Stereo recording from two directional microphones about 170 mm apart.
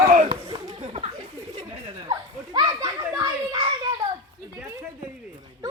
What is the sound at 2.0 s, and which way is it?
Children playing, 25° right (ahead or behind).